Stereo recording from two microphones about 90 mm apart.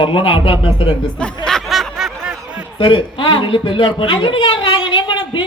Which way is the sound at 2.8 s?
70° left (ahead or behind).